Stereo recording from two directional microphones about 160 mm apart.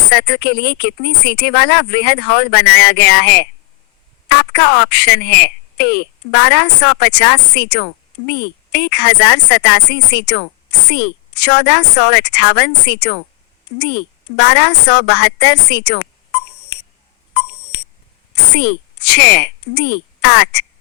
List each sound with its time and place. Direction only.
0.1 s speech: 85° left
4.4 s speech: 90° left
18.5 s speech: 90° left